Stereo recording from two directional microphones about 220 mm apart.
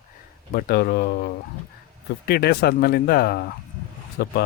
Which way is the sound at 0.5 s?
45° left (ahead or behind).